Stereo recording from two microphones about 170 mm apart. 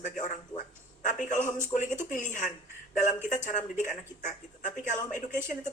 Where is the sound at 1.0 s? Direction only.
45° left (ahead or behind).